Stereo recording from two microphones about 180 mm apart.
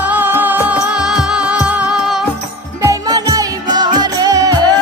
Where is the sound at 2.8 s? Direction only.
20° right (ahead or behind).